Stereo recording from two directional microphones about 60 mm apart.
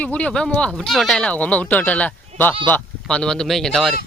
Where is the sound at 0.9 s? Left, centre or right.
Centre.